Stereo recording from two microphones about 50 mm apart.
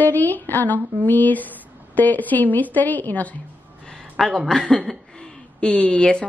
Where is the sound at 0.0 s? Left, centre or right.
Left.